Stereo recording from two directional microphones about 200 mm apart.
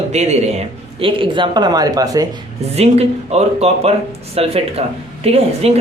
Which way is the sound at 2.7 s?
30° right (ahead or behind).